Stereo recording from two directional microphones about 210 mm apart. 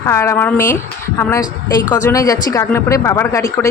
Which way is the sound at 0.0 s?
15° left (ahead or behind).